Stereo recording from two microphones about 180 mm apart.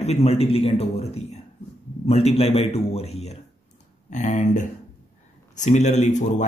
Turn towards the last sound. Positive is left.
turn(degrees=40)  # may be behind; listen again after turning